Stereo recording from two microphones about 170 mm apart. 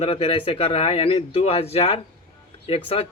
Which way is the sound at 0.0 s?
35° left (ahead or behind).